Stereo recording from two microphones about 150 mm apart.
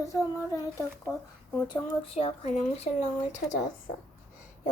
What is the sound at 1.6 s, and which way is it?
Child singing, 35° left (ahead or behind).